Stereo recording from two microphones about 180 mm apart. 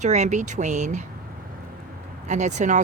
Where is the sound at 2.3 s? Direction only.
40° right (ahead or behind).